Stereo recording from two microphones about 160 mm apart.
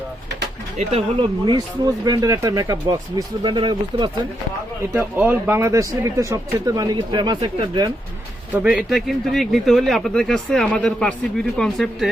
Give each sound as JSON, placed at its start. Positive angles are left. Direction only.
{"t": 0.8, "sound": "speech", "side_deg": -35}
{"t": 4.9, "sound": "speech", "side_deg": -10}
{"t": 8.6, "sound": "a man's voice", "side_deg": -10}